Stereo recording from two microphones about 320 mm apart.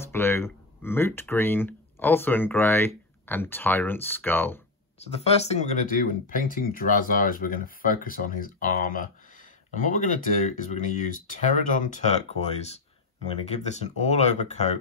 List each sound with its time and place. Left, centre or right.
0.0 s speech: centre
4.9 s speech: centre